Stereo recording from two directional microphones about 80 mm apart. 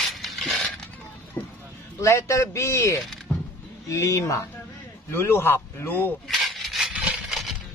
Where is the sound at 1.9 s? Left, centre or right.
Left.